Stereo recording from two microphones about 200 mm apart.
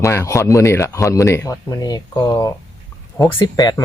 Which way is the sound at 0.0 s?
15° left (ahead or behind).